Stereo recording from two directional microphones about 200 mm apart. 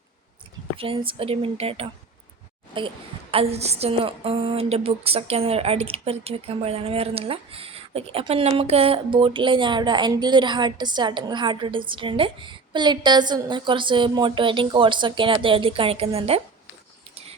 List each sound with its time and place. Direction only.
0.8 s a woman's voice: 25° right (ahead or behind)